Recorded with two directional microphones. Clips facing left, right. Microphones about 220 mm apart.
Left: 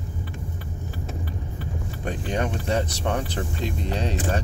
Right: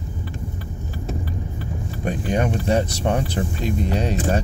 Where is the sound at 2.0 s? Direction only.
10° right (ahead or behind).